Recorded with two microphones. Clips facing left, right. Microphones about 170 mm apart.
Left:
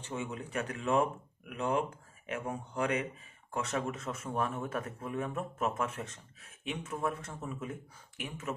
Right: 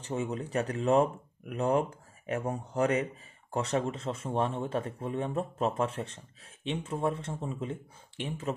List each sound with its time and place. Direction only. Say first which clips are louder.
0.0 s speech: right 5 dB; 35° right (ahead or behind)